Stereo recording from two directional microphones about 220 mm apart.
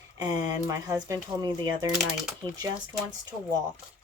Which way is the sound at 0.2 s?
15° right (ahead or behind).